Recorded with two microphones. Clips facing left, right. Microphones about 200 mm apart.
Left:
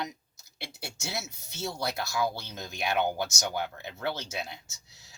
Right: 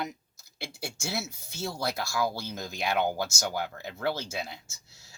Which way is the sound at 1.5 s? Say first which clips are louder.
Right 1 dB; centre (ahead or behind).